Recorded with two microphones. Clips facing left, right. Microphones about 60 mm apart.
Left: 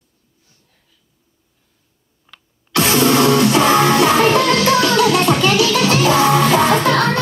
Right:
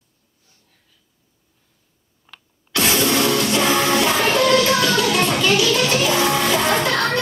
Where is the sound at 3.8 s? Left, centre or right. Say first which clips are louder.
Left 5 dB; left.